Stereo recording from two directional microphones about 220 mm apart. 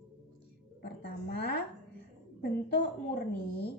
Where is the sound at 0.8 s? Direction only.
45° left (ahead or behind).